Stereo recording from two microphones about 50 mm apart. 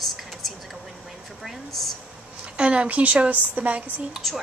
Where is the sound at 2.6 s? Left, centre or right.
Right.